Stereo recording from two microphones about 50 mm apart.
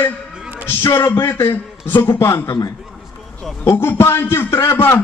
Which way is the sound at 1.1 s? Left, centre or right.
Left.